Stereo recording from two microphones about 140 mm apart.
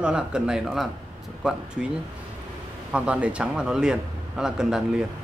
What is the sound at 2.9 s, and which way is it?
Speech, 10° right (ahead or behind).